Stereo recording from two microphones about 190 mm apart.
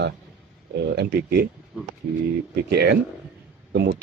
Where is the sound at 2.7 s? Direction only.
60° right (ahead or behind).